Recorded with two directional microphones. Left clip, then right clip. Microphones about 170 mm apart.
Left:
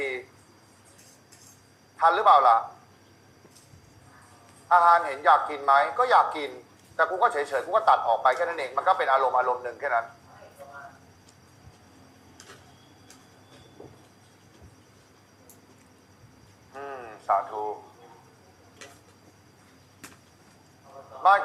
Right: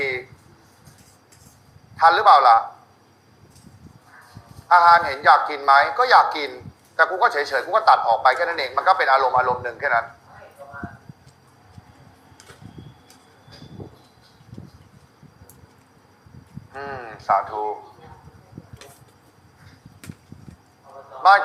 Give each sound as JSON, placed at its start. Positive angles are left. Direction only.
{"t": 0.0, "sound": "a sound", "side_deg": -20}
{"t": 2.0, "sound": "speech", "side_deg": -20}
{"t": 4.7, "sound": "speech", "side_deg": -20}
{"t": 13.8, "sound": "vehicle", "side_deg": -25}
{"t": 16.7, "sound": "speech", "side_deg": -20}
{"t": 20.9, "sound": "a sound", "side_deg": -25}